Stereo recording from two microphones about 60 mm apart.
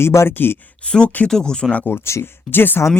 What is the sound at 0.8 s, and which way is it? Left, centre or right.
Speech, centre.